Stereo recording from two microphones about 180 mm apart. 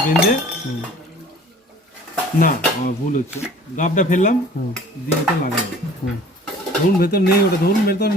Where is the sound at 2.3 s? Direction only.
50° left (ahead or behind).